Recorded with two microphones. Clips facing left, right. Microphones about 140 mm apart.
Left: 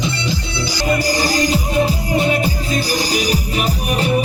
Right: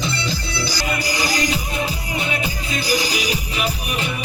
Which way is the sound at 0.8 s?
40° left (ahead or behind).